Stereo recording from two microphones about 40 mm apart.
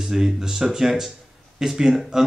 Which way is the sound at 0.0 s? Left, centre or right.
Centre.